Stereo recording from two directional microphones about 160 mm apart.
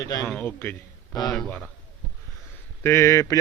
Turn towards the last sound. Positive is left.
turn(degrees=20)  # may be behind; listen again after turning